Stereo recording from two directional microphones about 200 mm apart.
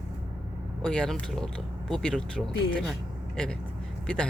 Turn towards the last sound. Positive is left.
turn(degrees=5)  # may be behind; listen again after turning